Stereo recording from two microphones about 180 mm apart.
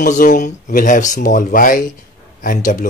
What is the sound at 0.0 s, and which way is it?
Speech, 45° left (ahead or behind).